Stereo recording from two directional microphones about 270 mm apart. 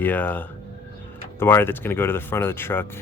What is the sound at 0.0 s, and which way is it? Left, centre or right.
Speech, centre.